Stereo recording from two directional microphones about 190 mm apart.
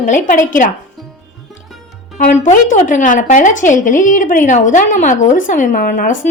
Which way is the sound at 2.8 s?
40° left (ahead or behind).